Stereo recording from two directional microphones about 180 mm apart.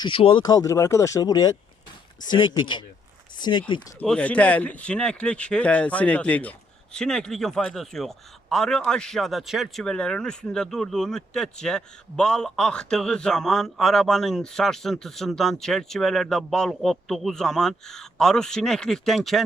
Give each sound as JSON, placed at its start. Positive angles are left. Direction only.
{"t": 0.0, "sound": "speech", "side_deg": 30}
{"t": 4.0, "sound": "a man's voice", "side_deg": 5}